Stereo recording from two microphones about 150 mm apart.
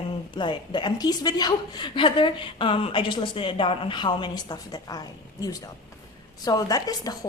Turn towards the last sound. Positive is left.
turn(degrees=25)  # may be behind; listen again after turning